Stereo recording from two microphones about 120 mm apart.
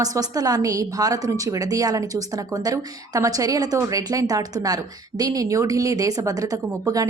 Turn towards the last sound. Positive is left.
turn(degrees=-30)  # may be behind; listen again after turning